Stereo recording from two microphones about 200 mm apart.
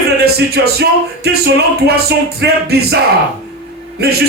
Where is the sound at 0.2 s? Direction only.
55° right (ahead or behind).